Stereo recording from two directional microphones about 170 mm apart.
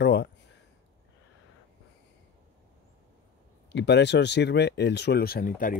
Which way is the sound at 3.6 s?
90° left.